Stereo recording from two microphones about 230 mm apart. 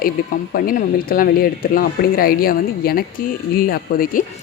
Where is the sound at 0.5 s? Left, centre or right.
Left.